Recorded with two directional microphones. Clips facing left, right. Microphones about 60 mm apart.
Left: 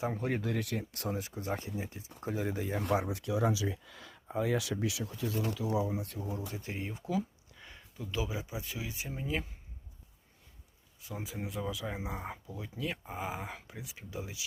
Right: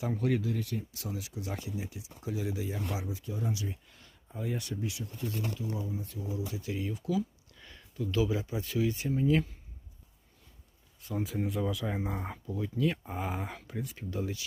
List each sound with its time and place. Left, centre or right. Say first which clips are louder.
0.0 s speech: right 3 dB; left
0.3 s speech: right 1 dB; left
6.5 s speech: right 4 dB; left
7.5 s speech: right 4 dB; centre
11.0 s speech: right 7 dB; centre